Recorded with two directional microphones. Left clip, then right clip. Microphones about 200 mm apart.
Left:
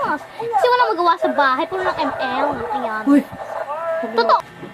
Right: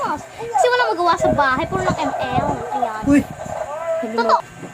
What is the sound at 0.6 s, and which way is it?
Speech, 10° left (ahead or behind).